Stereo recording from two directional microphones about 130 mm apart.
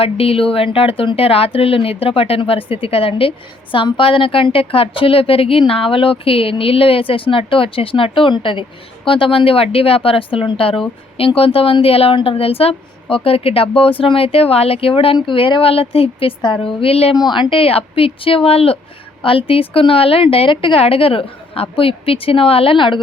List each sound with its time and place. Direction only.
0.0 s a woman's voice: 50° left (ahead or behind)
17.2 s a woman's voice: 35° left (ahead or behind)